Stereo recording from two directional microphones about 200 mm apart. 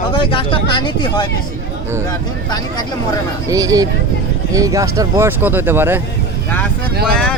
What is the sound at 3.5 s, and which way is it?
Speech, 15° right (ahead or behind).